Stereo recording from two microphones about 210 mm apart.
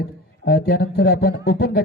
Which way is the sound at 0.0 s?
50° left (ahead or behind).